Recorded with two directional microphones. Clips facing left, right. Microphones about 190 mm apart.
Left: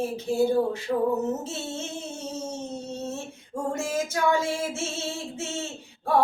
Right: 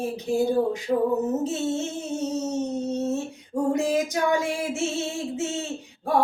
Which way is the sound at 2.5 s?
20° right (ahead or behind).